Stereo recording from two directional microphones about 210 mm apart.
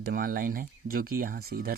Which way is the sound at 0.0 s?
45° right (ahead or behind).